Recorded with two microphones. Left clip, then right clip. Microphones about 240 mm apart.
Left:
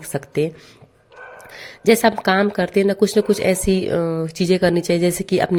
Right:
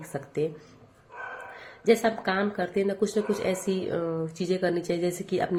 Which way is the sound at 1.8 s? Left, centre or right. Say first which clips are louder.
Left 8 dB; left.